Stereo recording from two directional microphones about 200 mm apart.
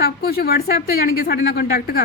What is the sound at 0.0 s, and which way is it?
A woman's voice, 50° left (ahead or behind).